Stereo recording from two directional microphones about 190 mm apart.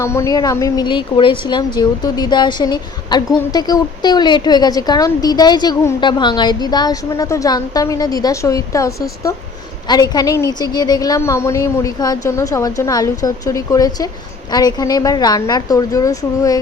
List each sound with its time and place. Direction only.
0.0 s a woman's voice: 15° left (ahead or behind)